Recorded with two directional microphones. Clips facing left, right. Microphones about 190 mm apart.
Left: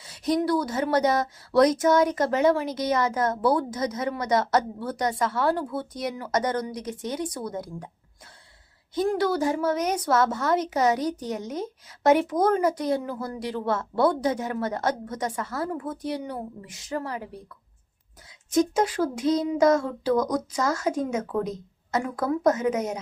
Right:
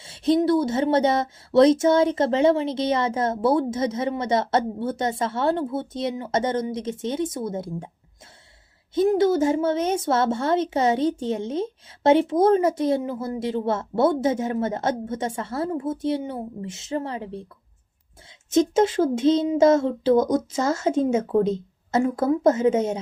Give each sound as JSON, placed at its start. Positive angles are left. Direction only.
{"t": 0.0, "sound": "speech", "side_deg": -25}
{"t": 9.0, "sound": "speech", "side_deg": -20}